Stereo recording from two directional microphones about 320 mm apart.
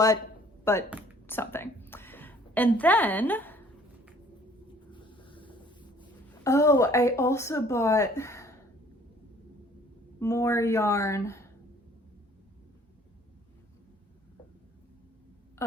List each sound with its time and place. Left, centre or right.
0.6 s a woman's voice: centre
4.9 s a sound: centre
6.0 s a woman's voice: centre
10.2 s a woman's voice: centre